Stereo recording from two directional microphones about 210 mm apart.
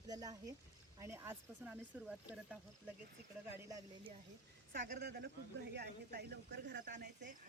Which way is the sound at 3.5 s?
15° right (ahead or behind).